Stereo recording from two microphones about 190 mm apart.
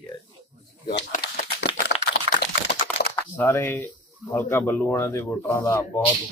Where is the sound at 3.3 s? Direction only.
15° left (ahead or behind).